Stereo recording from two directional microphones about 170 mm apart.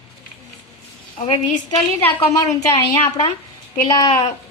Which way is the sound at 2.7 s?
25° left (ahead or behind).